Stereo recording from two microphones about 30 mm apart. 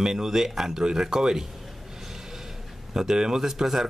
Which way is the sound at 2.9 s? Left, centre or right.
Right.